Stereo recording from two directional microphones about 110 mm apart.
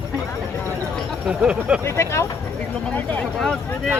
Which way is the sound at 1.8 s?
25° left (ahead or behind).